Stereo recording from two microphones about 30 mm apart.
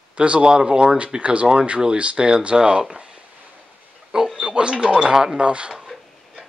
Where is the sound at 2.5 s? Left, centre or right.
Right.